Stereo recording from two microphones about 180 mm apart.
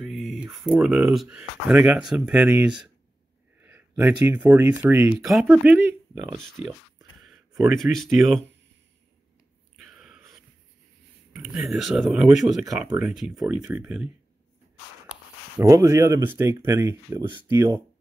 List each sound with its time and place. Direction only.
0.0 s speech: centre (ahead or behind)
3.6 s a sound: 10° right (ahead or behind)
4.6 s speech: 10° right (ahead or behind)
6.4 s speech: centre (ahead or behind)
7.7 s speech: centre (ahead or behind)
9.8 s a sound: 5° right (ahead or behind)
11.3 s speech: 5° right (ahead or behind)
12.6 s speech: 20° right (ahead or behind)
13.0 s speech: centre (ahead or behind)
15.6 s speech: 15° right (ahead or behind)